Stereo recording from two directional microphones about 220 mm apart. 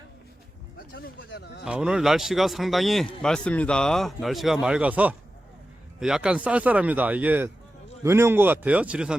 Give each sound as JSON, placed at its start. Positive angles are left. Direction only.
{"t": 0.9, "sound": "speech", "side_deg": 45}
{"t": 1.6, "sound": "speech", "side_deg": -5}